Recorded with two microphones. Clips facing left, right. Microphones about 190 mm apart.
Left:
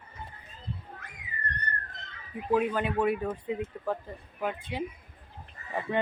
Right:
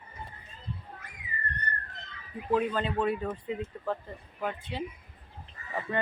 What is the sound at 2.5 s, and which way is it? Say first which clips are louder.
Speech: left 1 dB; 10° left (ahead or behind).